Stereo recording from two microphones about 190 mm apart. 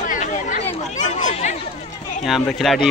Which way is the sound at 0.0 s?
45° left (ahead or behind).